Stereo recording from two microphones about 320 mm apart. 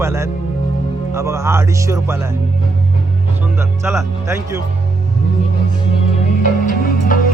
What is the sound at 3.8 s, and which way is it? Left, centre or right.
Music, centre.